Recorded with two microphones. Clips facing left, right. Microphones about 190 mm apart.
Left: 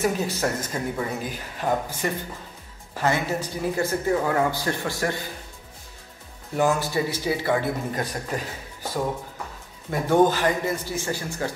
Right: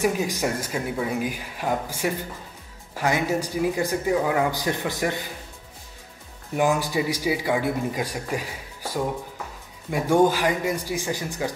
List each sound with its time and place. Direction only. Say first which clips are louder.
0.0 s a man's voice: right 1 dB; 15° right (ahead or behind)
6.5 s a man's voice: even; 15° right (ahead or behind)
9.8 s a man's voice: even; 10° right (ahead or behind)